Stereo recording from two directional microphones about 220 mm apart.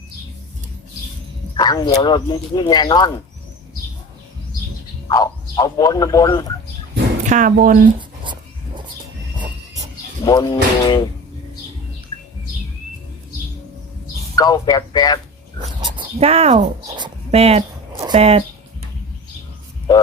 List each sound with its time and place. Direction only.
1.5 s speech: 15° left (ahead or behind)
5.0 s speech: 15° left (ahead or behind)
7.3 s speech: 35° right (ahead or behind)
7.9 s dog: 20° right (ahead or behind)
10.2 s speech: 20° left (ahead or behind)
14.3 s speech: 15° left (ahead or behind)
15.8 s dog: 20° right (ahead or behind)
18.0 s speech: 25° right (ahead or behind)